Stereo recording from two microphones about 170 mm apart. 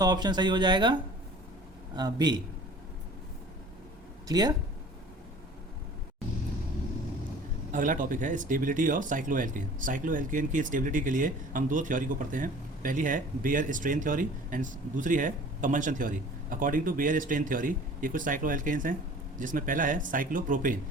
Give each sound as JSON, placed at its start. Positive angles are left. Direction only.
{"t": 0.0, "sound": "speech", "side_deg": -25}
{"t": 2.0, "sound": "speech", "side_deg": -25}
{"t": 4.3, "sound": "speech", "side_deg": -25}
{"t": 7.7, "sound": "speech", "side_deg": -50}